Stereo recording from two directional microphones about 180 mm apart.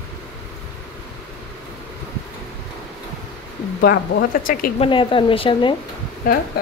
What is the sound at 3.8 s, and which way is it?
Speech, 55° left (ahead or behind).